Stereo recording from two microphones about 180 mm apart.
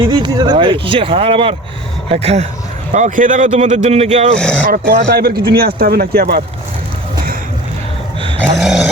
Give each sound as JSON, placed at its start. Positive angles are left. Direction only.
{"t": 0.1, "sound": "speech", "side_deg": -25}
{"t": 4.4, "sound": "speech", "side_deg": 5}
{"t": 4.6, "sound": "speech", "side_deg": -55}
{"t": 8.4, "sound": "snoring", "side_deg": 0}